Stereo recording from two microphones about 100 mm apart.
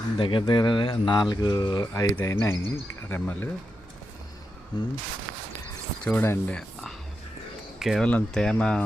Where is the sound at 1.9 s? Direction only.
35° left (ahead or behind).